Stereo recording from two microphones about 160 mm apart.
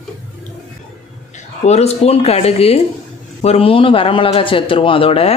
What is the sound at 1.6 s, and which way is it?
Speech, 40° left (ahead or behind).